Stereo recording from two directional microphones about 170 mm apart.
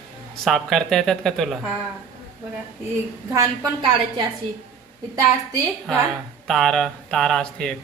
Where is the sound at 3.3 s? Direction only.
20° right (ahead or behind).